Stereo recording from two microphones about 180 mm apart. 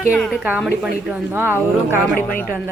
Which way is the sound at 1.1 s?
10° right (ahead or behind).